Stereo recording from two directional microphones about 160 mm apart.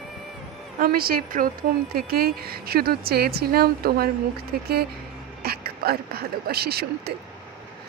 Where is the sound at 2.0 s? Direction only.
75° right (ahead or behind).